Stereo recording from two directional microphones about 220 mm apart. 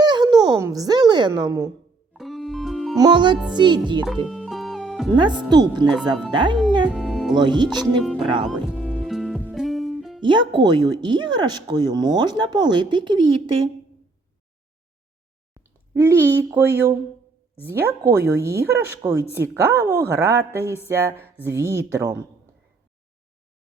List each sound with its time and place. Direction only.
0.0 s a sound: 20° right (ahead or behind)
2.1 s music: centre (ahead or behind)
3.0 s speech: 20° right (ahead or behind)
4.3 s music: centre (ahead or behind)
5.1 s speech: 20° right (ahead or behind)
6.8 s music: centre (ahead or behind)
7.3 s speech: 20° right (ahead or behind)
8.4 s music: centre (ahead or behind)
10.2 s speech: 20° right (ahead or behind)
15.5 s speech: 10° right (ahead or behind)